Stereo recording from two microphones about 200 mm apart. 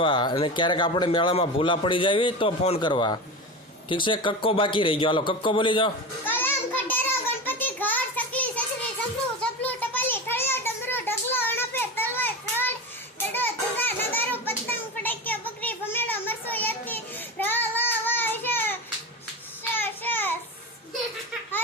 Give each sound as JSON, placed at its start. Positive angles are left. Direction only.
{"t": 0.0, "sound": "a man's voice", "side_deg": 25}
{"t": 6.2, "sound": "a sound", "side_deg": 10}
{"t": 13.3, "sound": "children playing", "side_deg": 10}
{"t": 19.7, "sound": "child singing", "side_deg": 10}